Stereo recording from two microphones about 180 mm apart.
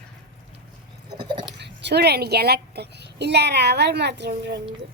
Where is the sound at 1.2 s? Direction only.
25° right (ahead or behind).